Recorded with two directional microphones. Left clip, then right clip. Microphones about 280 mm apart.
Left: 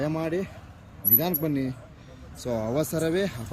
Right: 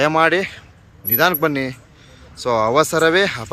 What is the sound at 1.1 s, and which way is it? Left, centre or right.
Speech, centre.